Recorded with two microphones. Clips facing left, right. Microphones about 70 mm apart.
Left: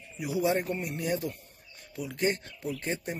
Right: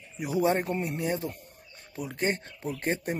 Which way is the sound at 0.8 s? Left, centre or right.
Right.